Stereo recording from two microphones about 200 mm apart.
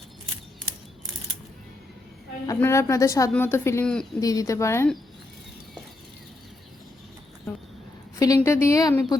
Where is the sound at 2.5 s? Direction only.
15° left (ahead or behind).